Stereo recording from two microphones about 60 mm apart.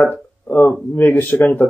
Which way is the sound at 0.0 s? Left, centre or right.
Left.